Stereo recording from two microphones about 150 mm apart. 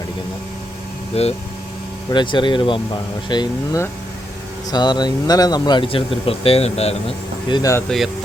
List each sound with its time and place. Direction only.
1.1 s speech: 45° left (ahead or behind)
2.0 s speech: 30° left (ahead or behind)
7.5 s speech: 20° left (ahead or behind)
7.9 s speech: centre (ahead or behind)